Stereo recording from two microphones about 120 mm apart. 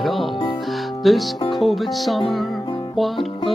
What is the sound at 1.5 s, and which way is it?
Music, centre (ahead or behind).